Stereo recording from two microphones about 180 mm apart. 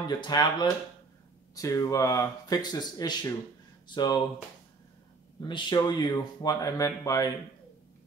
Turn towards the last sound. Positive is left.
turn(degrees=20)  # may be behind; listen again after turning